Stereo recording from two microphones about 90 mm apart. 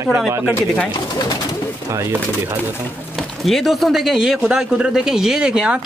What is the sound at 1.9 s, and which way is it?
Speech, 35° right (ahead or behind).